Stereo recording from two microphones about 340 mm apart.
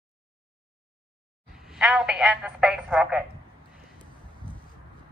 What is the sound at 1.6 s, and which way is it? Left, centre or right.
Speech, centre.